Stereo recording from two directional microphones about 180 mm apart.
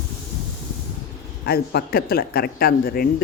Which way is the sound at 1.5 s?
60° left (ahead or behind).